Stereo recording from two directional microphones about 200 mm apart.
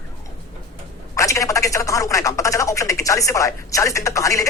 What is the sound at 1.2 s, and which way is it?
Speech, 15° left (ahead or behind).